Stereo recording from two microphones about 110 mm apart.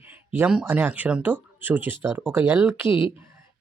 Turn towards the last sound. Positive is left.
turn(degrees=50)  # may be behind; listen again after turning